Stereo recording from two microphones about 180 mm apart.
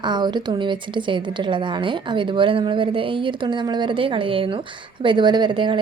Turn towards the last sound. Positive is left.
turn(degrees=-25)  # may be behind; listen again after turning